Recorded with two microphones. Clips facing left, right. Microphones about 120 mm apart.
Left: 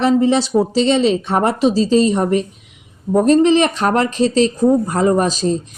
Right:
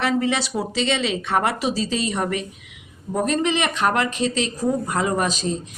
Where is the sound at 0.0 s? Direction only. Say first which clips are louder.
Left 8 dB; 35° left (ahead or behind).